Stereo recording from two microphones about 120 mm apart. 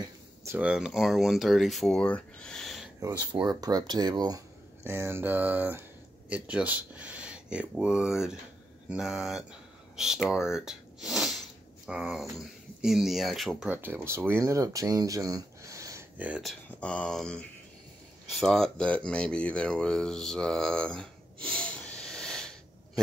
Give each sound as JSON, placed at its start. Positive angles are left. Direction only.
{"t": 0.0, "sound": "a sound", "side_deg": -25}
{"t": 0.6, "sound": "speech", "side_deg": -5}
{"t": 3.3, "sound": "speech", "side_deg": -35}
{"t": 4.8, "sound": "speech", "side_deg": -20}
{"t": 13.7, "sound": "speech", "side_deg": -15}
{"t": 16.2, "sound": "speech", "side_deg": -10}
{"t": 16.4, "sound": "speech", "side_deg": 10}